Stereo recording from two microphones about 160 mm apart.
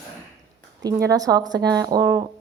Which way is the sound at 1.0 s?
20° right (ahead or behind).